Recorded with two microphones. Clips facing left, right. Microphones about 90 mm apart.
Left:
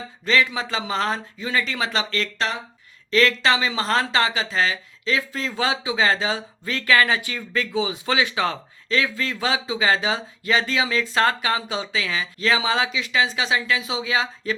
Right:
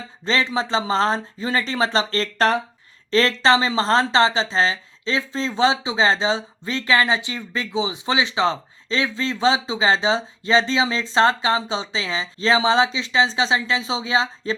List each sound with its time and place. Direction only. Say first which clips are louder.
0.3 s speech: even; 30° right (ahead or behind)